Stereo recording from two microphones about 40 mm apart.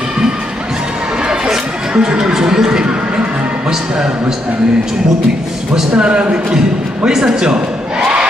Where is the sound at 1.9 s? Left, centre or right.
Right.